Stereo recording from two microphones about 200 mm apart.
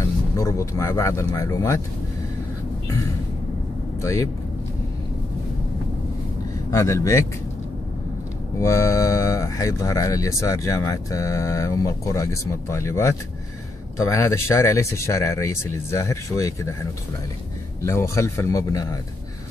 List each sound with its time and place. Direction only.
0.4 s speech: 15° left (ahead or behind)
4.0 s speech: 15° left (ahead or behind)
6.7 s speech: 15° left (ahead or behind)
8.5 s speech: 15° left (ahead or behind)
17.8 s speech: 15° left (ahead or behind)